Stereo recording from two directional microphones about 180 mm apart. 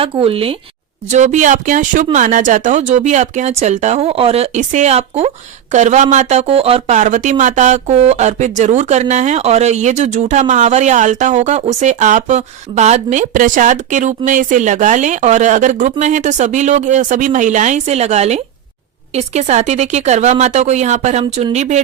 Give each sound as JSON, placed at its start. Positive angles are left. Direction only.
{"t": 0.0, "sound": "speech", "side_deg": -30}